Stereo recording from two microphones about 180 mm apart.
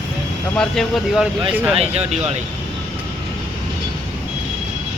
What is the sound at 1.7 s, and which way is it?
Speech, 35° right (ahead or behind).